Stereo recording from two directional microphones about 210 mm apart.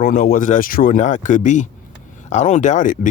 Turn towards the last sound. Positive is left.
turn(degrees=35)  # may be behind; listen again after turning